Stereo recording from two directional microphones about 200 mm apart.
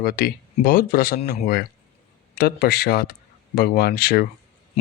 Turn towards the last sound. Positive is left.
turn(degrees=50)  # may be behind; listen again after turning